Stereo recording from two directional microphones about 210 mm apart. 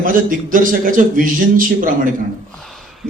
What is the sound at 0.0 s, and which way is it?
A man's voice, 40° right (ahead or behind).